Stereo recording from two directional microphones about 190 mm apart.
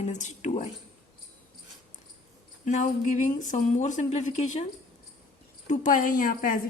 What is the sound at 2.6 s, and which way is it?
A woman's voice, 40° left (ahead or behind).